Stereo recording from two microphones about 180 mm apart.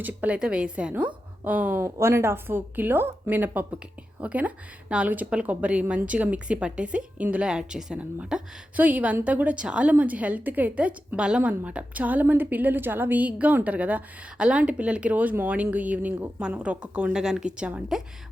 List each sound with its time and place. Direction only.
0.0 s a woman's voice: 10° right (ahead or behind)